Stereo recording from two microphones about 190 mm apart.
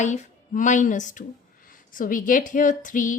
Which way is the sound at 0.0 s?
40° left (ahead or behind).